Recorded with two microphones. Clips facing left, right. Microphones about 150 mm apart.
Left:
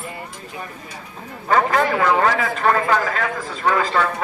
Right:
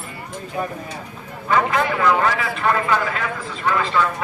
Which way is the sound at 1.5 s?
40° left (ahead or behind).